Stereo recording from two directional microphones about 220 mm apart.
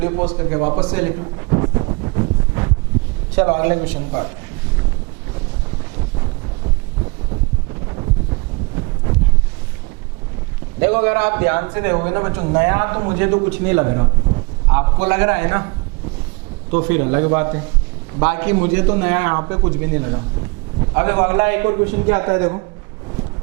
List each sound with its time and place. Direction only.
0.0 s a man's voice: 20° right (ahead or behind)
0.9 s a sound: 15° right (ahead or behind)
3.3 s a man's voice: 10° right (ahead or behind)
7.9 s wind noise: 20° right (ahead or behind)
10.8 s a man's voice: 10° right (ahead or behind)
14.7 s a man's voice: 10° right (ahead or behind)
16.7 s a man's voice: 15° right (ahead or behind)
20.7 s a sound: 25° right (ahead or behind)
21.0 s a man's voice: 15° right (ahead or behind)